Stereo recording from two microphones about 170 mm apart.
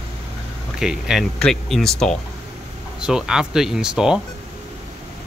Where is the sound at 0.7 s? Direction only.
5° right (ahead or behind).